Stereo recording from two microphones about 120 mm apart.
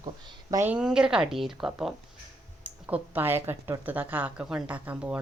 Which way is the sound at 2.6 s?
15° right (ahead or behind).